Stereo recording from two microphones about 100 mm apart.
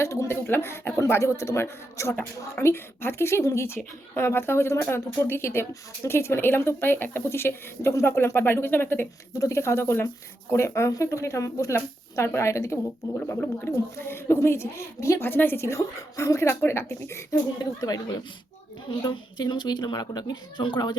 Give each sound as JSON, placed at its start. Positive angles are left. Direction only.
{"t": 0.0, "sound": "speech", "side_deg": 30}
{"t": 17.6, "sound": "a woman's voice", "side_deg": 40}